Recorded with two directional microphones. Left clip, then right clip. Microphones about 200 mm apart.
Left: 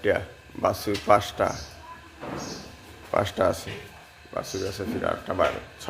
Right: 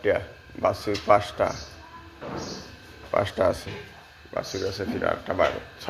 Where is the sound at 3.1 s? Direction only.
25° left (ahead or behind).